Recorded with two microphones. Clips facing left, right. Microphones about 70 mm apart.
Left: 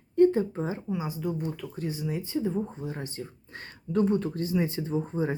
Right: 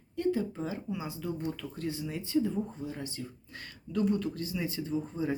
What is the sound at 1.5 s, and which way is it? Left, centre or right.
Speech, centre.